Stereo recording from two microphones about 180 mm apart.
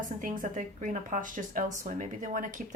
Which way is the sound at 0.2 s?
45° right (ahead or behind).